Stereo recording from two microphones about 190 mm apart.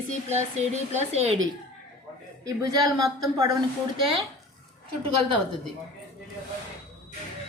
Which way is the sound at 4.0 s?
30° right (ahead or behind).